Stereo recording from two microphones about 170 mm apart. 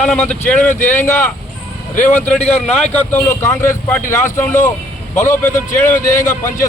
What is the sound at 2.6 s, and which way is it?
A man's voice, 5° left (ahead or behind).